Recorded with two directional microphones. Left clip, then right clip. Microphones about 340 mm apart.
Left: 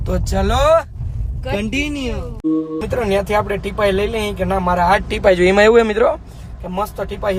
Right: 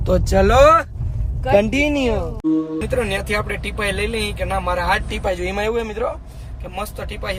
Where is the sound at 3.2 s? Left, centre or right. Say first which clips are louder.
Left 5 dB; centre.